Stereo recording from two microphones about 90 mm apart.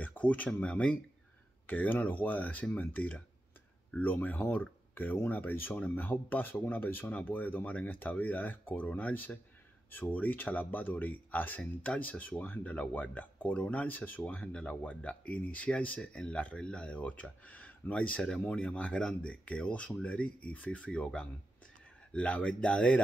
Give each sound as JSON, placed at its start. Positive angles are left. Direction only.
{"t": 0.0, "sound": "speech", "side_deg": 15}